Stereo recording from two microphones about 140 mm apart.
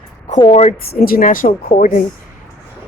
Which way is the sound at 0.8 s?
90° left.